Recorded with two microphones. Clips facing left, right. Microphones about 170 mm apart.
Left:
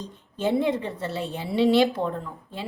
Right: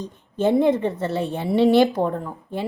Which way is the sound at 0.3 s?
50° right (ahead or behind).